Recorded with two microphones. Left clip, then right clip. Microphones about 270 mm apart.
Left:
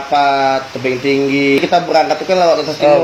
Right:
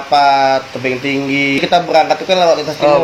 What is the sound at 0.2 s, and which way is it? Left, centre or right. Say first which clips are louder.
A man's voice: right 2 dB; right.